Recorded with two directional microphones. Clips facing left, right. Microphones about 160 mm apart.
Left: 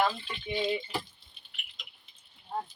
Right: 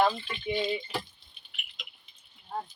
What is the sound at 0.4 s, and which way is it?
Speech, centre (ahead or behind).